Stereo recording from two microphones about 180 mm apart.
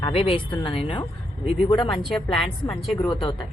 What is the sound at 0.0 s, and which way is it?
Speech, 30° left (ahead or behind).